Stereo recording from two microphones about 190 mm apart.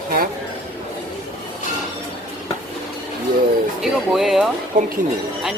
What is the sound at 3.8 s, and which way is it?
Speech, centre (ahead or behind).